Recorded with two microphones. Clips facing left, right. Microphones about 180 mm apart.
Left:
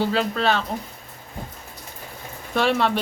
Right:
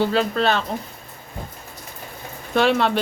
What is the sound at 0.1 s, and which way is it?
Speech, 5° left (ahead or behind).